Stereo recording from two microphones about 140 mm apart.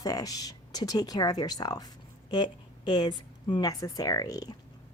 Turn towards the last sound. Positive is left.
turn(degrees=25)  # may be behind; listen again after turning